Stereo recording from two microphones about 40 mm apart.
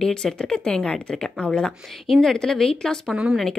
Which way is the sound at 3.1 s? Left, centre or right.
Centre.